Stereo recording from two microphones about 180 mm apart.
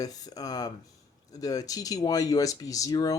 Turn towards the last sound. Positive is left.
turn(degrees=20)  # may be behind; listen again after turning